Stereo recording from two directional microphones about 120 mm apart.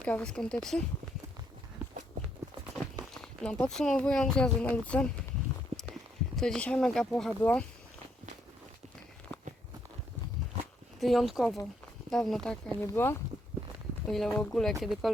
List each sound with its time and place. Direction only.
0.0 s speech: 10° left (ahead or behind)
3.2 s speech: 10° left (ahead or behind)
11.0 s speech: centre (ahead or behind)
12.8 s speech: 20° left (ahead or behind)
14.1 s speech: centre (ahead or behind)